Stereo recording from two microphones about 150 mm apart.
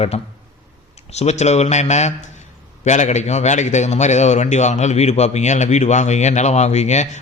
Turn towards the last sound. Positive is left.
turn(degrees=50)  # may be behind; listen again after turning